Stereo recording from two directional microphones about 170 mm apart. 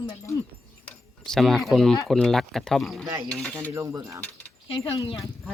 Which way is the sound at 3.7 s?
20° right (ahead or behind).